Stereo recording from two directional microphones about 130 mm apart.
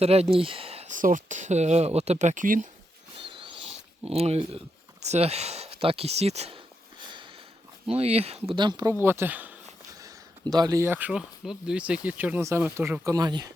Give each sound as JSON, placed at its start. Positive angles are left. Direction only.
{"t": 0.0, "sound": "speech", "side_deg": -50}
{"t": 0.9, "sound": "speech", "side_deg": -85}
{"t": 3.2, "sound": "a sound", "side_deg": -40}
{"t": 5.0, "sound": "speech", "side_deg": -55}
{"t": 7.9, "sound": "speech", "side_deg": -50}
{"t": 8.5, "sound": "speech", "side_deg": -35}
{"t": 8.9, "sound": "speech", "side_deg": -20}
{"t": 10.0, "sound": "a sound", "side_deg": -30}
{"t": 11.1, "sound": "speech", "side_deg": -5}
{"t": 13.1, "sound": "speech", "side_deg": -30}